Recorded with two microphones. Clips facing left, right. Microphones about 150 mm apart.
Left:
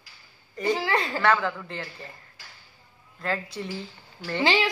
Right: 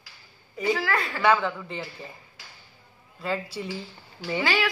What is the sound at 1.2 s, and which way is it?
Speech, 5° right (ahead or behind).